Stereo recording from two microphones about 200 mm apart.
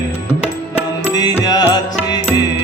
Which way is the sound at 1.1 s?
20° left (ahead or behind).